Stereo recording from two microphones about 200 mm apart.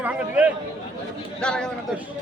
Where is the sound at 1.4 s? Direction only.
5° left (ahead or behind).